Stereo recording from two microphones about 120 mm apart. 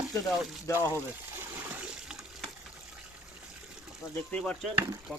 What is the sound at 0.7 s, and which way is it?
Speech, 20° right (ahead or behind).